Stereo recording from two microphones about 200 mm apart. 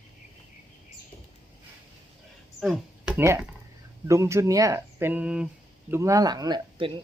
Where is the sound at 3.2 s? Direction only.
15° right (ahead or behind).